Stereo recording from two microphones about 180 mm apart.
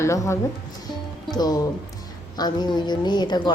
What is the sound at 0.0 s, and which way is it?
Speech, 15° left (ahead or behind).